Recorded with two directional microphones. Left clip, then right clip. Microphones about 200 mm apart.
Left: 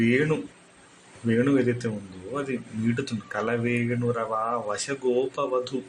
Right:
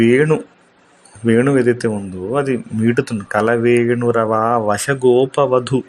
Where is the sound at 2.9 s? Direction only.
45° right (ahead or behind).